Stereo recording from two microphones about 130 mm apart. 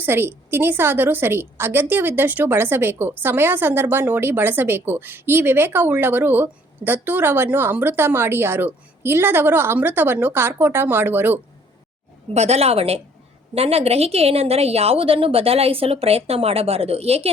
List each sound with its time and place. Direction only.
0.0 s a woman's voice: 20° right (ahead or behind)
12.3 s a woman's voice: 55° right (ahead or behind)